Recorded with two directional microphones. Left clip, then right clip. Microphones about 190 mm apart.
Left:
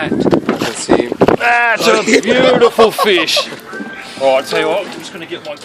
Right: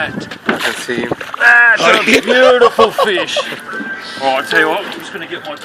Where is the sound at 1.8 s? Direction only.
30° right (ahead or behind).